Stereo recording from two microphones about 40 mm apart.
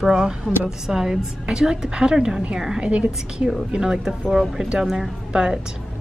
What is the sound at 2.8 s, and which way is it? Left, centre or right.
Speech, right.